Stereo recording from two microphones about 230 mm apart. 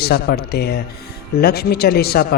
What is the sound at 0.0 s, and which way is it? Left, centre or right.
Speech, left.